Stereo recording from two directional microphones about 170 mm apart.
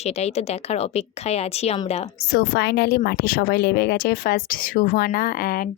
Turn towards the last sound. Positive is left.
turn(degrees=55)  # may be behind; listen again after turning